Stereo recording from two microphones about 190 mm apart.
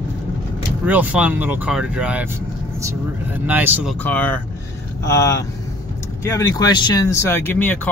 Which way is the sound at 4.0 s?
10° left (ahead or behind).